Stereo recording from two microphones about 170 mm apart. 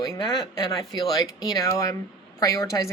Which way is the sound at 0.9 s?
20° left (ahead or behind).